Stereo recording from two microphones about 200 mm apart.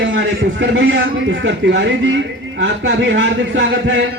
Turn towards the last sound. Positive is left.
turn(degrees=-70)  # may be behind; listen again after turning